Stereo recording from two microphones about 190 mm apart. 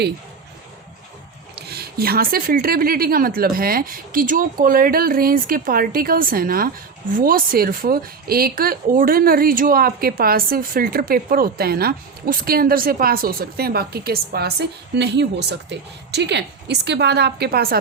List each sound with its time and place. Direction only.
1.5 s a woman's voice: 55° right (ahead or behind)